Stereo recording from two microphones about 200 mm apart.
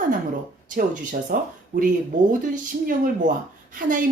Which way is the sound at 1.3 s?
45° right (ahead or behind).